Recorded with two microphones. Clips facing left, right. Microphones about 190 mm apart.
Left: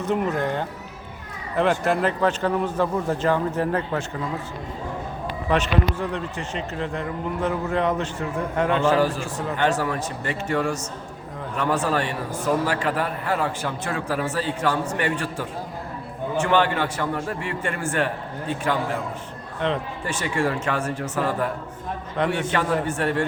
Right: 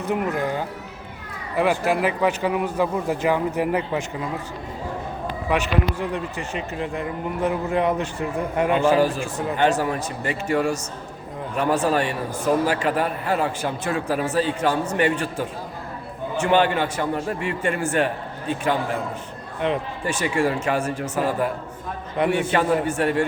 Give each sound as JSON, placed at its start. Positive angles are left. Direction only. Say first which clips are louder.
{"t": 0.0, "sound": "a man's voice", "louder": "even", "side_deg": -10}
{"t": 5.5, "sound": "a man's voice", "louder": "left 1 dB", "side_deg": -10}